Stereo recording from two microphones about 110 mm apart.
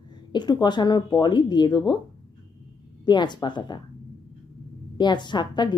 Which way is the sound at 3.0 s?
45° left (ahead or behind).